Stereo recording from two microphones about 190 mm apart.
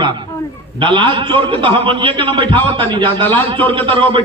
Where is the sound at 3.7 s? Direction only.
25° right (ahead or behind).